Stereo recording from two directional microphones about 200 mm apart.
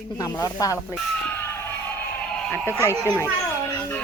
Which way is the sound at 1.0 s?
10° left (ahead or behind).